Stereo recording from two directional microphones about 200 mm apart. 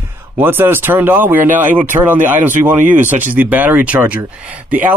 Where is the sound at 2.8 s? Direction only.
40° right (ahead or behind).